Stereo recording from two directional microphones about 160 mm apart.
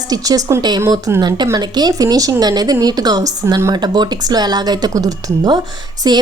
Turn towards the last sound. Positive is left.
turn(degrees=-25)  # may be behind; listen again after turning